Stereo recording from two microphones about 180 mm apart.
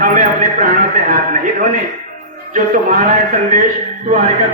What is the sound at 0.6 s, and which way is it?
A man's voice, 45° right (ahead or behind).